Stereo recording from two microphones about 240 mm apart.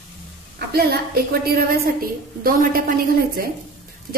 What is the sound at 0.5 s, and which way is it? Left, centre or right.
A woman's voice, right.